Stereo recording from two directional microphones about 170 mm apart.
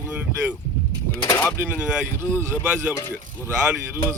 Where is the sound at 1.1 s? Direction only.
10° left (ahead or behind).